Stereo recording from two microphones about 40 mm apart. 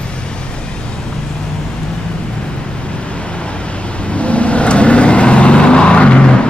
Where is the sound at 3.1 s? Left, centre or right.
Left.